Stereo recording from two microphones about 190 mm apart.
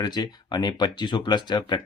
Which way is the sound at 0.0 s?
20° left (ahead or behind).